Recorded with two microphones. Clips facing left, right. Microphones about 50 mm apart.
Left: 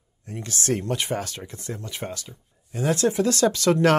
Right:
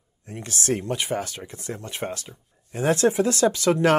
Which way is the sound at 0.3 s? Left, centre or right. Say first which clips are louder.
Even; right.